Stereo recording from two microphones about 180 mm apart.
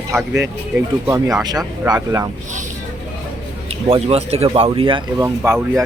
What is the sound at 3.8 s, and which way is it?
Speech, 30° right (ahead or behind).